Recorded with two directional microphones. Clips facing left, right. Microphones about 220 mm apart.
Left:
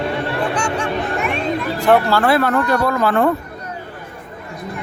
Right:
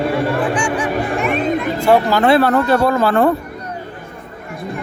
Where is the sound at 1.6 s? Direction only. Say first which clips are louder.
Left 1 dB; 15° right (ahead or behind).